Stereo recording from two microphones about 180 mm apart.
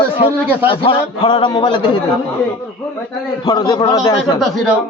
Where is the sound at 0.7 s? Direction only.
25° left (ahead or behind).